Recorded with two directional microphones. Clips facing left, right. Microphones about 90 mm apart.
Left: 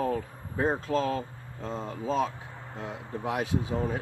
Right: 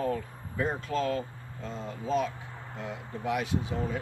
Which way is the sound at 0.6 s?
30° left (ahead or behind).